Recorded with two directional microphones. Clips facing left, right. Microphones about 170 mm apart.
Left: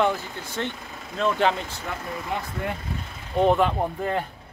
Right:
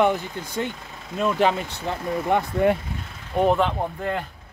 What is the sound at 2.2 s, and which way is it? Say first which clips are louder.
Speech: right 12 dB; 60° right (ahead or behind).